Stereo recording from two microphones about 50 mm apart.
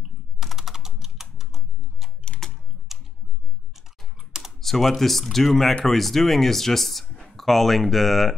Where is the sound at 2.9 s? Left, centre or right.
Centre.